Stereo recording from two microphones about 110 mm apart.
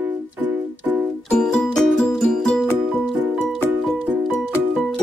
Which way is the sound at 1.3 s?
5° left (ahead or behind).